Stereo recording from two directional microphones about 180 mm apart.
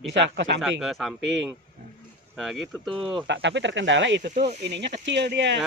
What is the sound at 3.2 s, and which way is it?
Speech, 75° right (ahead or behind).